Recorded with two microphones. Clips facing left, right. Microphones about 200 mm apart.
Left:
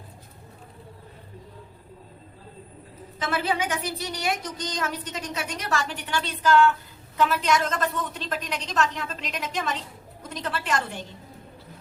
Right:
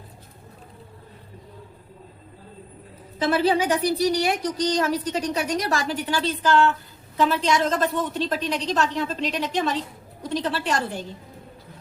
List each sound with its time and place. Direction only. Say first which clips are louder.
3.2 s a woman's voice: right 6 dB; 35° right (ahead or behind)